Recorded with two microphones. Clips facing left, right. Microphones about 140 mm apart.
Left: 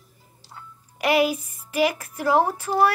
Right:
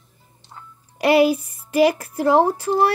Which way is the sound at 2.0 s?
35° right (ahead or behind).